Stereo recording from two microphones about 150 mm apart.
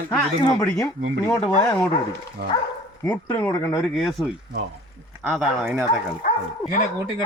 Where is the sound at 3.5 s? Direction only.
25° left (ahead or behind).